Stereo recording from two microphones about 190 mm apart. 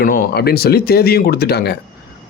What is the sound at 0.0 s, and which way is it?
Speech, 55° left (ahead or behind).